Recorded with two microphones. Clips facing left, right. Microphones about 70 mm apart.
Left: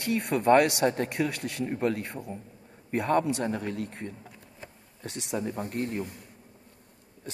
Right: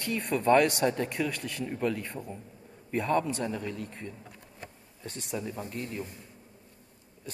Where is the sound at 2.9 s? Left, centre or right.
Left.